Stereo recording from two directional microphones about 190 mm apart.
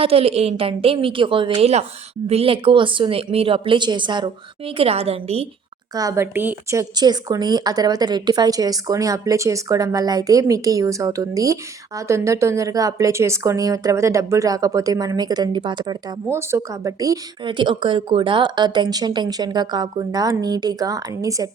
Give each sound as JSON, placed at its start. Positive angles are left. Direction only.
{"t": 0.0, "sound": "a woman's voice", "side_deg": -30}
{"t": 5.9, "sound": "speech", "side_deg": -20}